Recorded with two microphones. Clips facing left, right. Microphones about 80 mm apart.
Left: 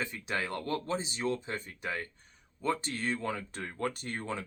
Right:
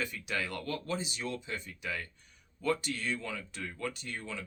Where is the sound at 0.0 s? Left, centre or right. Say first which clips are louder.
Left 1 dB; left.